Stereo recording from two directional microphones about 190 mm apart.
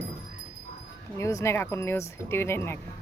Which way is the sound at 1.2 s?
15° left (ahead or behind).